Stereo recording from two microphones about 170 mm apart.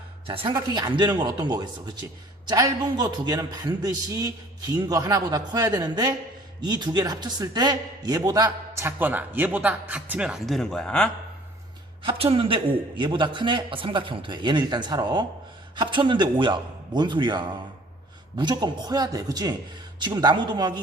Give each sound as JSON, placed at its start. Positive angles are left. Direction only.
{"t": 0.3, "sound": "a man's voice", "side_deg": -25}
{"t": 12.0, "sound": "a man's voice", "side_deg": -35}